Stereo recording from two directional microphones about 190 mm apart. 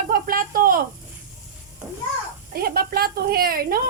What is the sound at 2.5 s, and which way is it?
A woman's voice, 50° right (ahead or behind).